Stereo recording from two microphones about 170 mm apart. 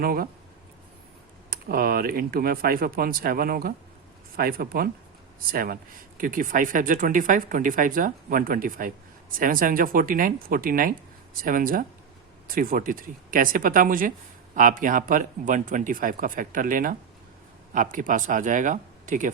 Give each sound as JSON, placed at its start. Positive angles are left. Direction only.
{"t": 0.0, "sound": "speech", "side_deg": -60}
{"t": 1.5, "sound": "speech", "side_deg": -60}